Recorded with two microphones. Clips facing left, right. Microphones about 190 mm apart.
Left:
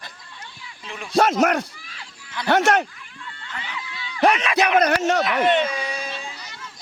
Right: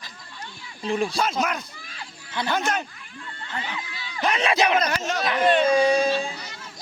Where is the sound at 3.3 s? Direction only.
35° right (ahead or behind).